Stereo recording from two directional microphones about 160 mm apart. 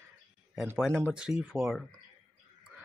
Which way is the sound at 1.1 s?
5° right (ahead or behind).